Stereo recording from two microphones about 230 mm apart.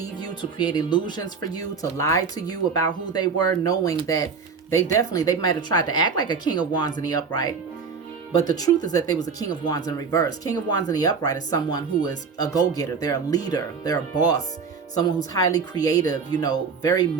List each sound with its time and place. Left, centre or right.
0.2 s speech: centre